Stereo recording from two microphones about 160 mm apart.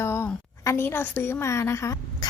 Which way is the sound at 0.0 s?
15° left (ahead or behind).